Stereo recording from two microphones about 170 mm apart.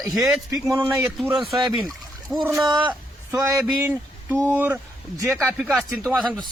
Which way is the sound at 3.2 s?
15° right (ahead or behind).